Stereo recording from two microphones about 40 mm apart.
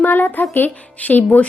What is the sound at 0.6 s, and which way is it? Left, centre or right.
Speech, left.